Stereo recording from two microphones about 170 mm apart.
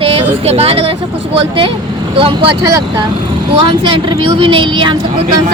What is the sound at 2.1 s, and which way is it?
Speech, 30° right (ahead or behind).